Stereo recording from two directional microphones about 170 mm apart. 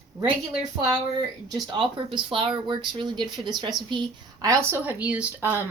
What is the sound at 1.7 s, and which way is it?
Speech, 30° right (ahead or behind).